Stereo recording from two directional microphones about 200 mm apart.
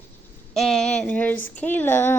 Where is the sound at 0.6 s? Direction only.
Centre (ahead or behind).